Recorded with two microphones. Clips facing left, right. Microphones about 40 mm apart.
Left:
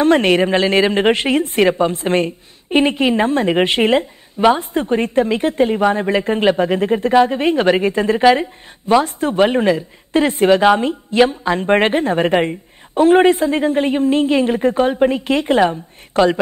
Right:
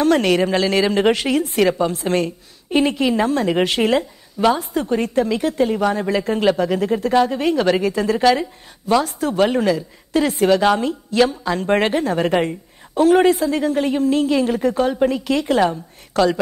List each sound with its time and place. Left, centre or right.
0.0 s a woman's voice: left